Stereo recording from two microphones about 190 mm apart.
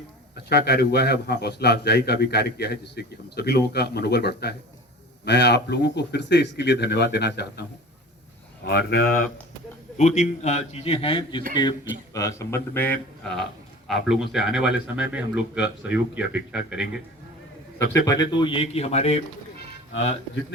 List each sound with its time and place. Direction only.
0.3 s a man's voice: 60° left (ahead or behind)
8.6 s speech: 55° left (ahead or behind)
10.0 s a man's voice: 40° left (ahead or behind); by 17.0 s 5° right (ahead or behind)
17.9 s a man's voice: 15° left (ahead or behind); by 19.2 s 35° left (ahead or behind)